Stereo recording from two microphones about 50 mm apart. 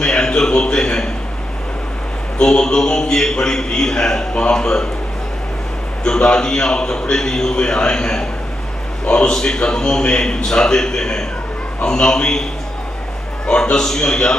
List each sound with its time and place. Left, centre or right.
0.0 s a sound: centre
2.3 s a man's voice: centre
6.0 s a man's voice: centre
13.5 s a man's voice: centre